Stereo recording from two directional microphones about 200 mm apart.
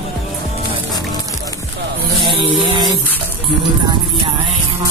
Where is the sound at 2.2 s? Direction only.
25° right (ahead or behind).